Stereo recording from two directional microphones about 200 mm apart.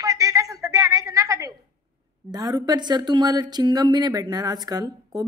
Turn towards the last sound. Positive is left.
turn(degrees=-20)  # may be behind; listen again after turning